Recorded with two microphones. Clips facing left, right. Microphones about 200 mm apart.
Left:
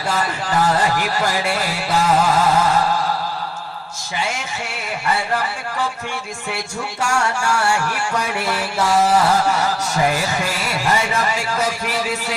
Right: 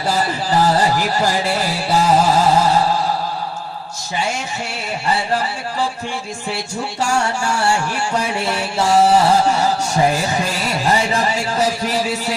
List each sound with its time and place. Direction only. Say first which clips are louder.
0.1 s music: right 3 dB; 35° right (ahead or behind)
5.0 s music: right 2 dB; 30° right (ahead or behind)
7.0 s music: right 1 dB; 30° right (ahead or behind)
10.8 s speech: right 2 dB; 30° right (ahead or behind)